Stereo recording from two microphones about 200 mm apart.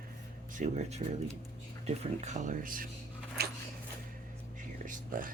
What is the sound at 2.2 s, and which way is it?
Speech, 40° right (ahead or behind).